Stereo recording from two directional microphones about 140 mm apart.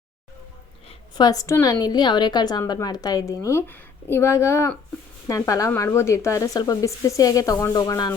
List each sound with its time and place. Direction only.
0.9 s a woman's voice: 30° left (ahead or behind)